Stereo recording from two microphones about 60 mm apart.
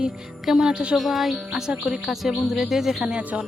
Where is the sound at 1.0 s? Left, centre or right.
Centre.